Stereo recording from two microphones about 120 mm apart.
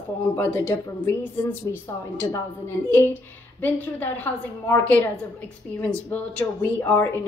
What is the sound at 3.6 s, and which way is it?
A woman's voice, 15° left (ahead or behind).